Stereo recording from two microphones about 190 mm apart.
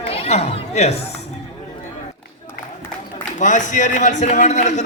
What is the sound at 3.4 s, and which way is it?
A man's voice, 40° left (ahead or behind).